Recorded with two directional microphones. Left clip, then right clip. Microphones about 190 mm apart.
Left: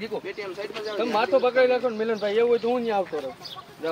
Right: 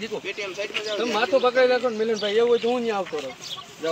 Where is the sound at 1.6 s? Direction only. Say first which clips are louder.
Right 1 dB; 50° right (ahead or behind).